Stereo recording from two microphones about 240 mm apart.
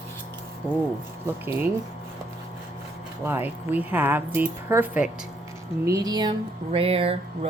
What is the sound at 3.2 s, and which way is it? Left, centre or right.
Speech, centre.